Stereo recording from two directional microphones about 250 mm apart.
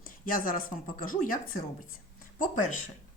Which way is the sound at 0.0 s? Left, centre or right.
Left.